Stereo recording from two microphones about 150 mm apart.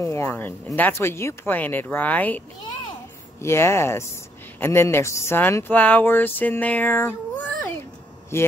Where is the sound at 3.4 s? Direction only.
15° left (ahead or behind).